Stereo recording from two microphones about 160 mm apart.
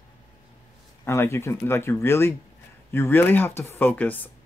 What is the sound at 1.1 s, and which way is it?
Speech, 15° left (ahead or behind).